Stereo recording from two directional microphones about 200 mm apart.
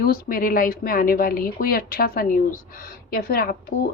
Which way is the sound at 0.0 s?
45° left (ahead or behind).